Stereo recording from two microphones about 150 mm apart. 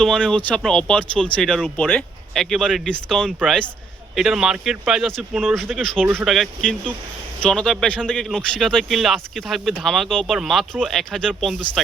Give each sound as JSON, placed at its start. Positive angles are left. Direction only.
{"t": 0.0, "sound": "speech", "side_deg": 5}